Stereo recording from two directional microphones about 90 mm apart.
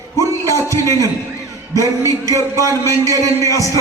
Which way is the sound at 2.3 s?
35° left (ahead or behind).